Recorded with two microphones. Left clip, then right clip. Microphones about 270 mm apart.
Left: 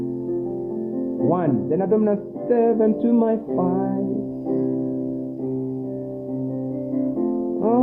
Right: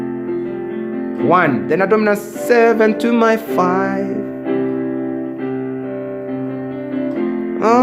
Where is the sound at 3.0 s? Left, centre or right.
Right.